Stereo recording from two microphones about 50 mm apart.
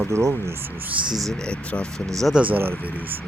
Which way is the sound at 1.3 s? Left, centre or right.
Centre.